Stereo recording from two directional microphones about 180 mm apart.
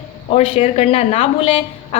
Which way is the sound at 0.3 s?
35° left (ahead or behind).